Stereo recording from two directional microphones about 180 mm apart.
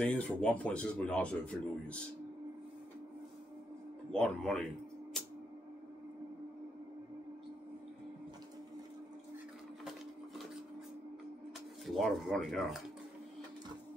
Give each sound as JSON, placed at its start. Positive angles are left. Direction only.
{"t": 0.0, "sound": "speech", "side_deg": 5}
{"t": 4.1, "sound": "speech", "side_deg": 5}
{"t": 11.8, "sound": "speech", "side_deg": 0}